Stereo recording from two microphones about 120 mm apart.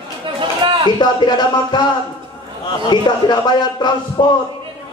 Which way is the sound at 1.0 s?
35° left (ahead or behind).